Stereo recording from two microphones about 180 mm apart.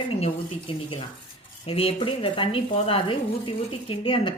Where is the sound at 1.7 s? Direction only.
30° left (ahead or behind).